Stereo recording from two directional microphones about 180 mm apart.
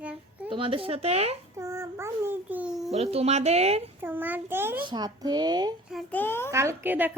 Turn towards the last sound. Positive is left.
turn(degrees=-10)  # may be behind; listen again after turning